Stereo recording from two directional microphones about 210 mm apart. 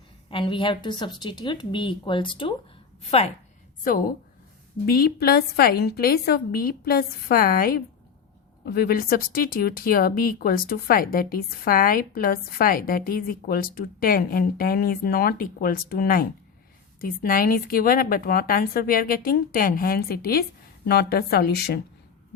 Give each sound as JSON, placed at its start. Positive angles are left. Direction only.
{"t": 0.3, "sound": "a woman's voice", "side_deg": 25}
{"t": 4.9, "sound": "speech", "side_deg": 45}